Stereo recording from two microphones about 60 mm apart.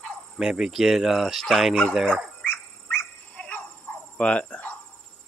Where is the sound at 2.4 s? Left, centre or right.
Left.